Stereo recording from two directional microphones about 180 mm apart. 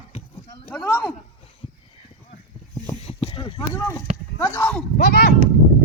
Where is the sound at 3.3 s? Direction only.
25° left (ahead or behind).